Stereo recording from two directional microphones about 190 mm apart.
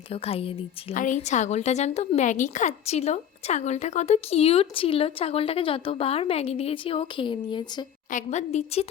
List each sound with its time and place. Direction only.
0.1 s a woman's voice: 30° left (ahead or behind)
0.9 s a woman's voice: 40° left (ahead or behind); by 7.9 s 25° left (ahead or behind)
8.1 s a woman's voice: 40° left (ahead or behind)